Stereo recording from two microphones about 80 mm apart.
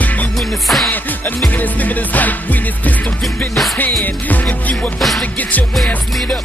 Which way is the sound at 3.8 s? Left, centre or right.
Left.